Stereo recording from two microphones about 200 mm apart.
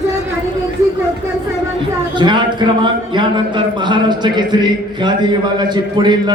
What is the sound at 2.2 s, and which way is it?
Speech, 25° right (ahead or behind).